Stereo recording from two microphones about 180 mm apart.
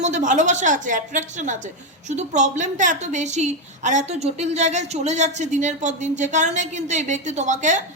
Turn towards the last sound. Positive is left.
turn(degrees=-40)  # may be behind; listen again after turning